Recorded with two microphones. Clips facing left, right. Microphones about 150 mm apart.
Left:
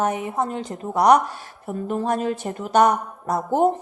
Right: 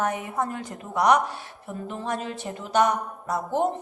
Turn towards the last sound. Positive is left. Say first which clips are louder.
# left 5 dB
turn(degrees=45)  # may be behind; listen again after turning